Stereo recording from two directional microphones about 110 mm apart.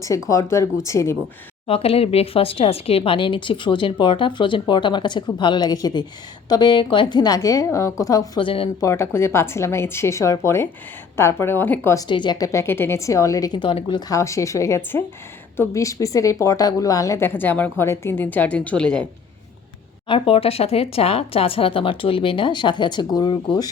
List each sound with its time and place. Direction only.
0.3 s a woman's voice: 30° left (ahead or behind)
1.6 s a woman's voice: 60° left (ahead or behind); by 8.3 s 30° left (ahead or behind)
8.4 s speech: 55° left (ahead or behind)
8.8 s a woman's voice: 25° left (ahead or behind)
12.0 s speech: 45° left (ahead or behind)
12.5 s a woman's voice: 25° left (ahead or behind)
13.6 s speech: 50° left (ahead or behind)
14.1 s a woman's voice: 30° left (ahead or behind); by 19.0 s 10° left (ahead or behind)
20.1 s speech: 55° left (ahead or behind); by 23.6 s 40° left (ahead or behind)